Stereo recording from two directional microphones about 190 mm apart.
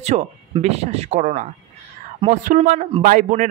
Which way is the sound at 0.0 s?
40° right (ahead or behind).